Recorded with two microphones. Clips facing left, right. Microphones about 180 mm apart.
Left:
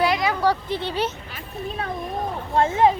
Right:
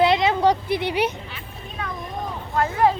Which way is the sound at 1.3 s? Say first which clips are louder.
Left 6 dB; 40° left (ahead or behind).